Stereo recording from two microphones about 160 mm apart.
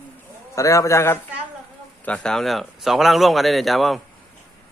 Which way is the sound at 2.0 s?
5° left (ahead or behind).